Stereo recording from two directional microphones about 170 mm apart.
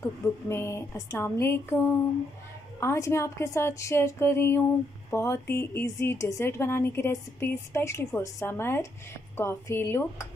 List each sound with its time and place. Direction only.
0.0 s speech: 15° left (ahead or behind)